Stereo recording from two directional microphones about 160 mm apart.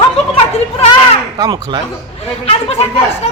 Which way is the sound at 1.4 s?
25° right (ahead or behind).